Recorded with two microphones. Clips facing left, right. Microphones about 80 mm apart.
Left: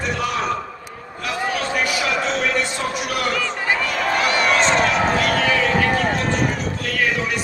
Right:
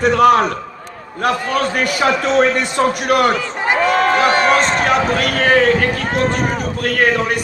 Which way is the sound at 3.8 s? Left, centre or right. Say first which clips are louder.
Right 8 dB; right.